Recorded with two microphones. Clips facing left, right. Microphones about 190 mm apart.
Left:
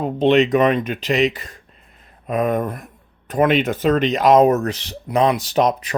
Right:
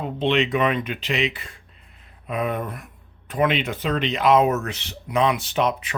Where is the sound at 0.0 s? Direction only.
40° left (ahead or behind).